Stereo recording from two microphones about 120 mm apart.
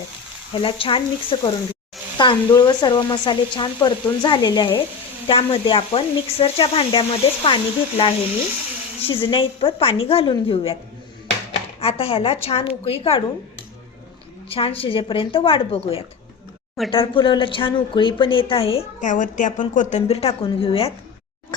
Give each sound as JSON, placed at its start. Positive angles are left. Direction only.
{"t": 0.5, "sound": "speech", "side_deg": 50}
{"t": 11.8, "sound": "speech", "side_deg": 55}
{"t": 14.5, "sound": "speech", "side_deg": 50}
{"t": 18.9, "sound": "a woman's voice", "side_deg": 90}